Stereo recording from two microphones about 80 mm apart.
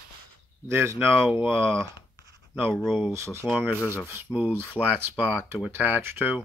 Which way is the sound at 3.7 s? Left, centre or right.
Left.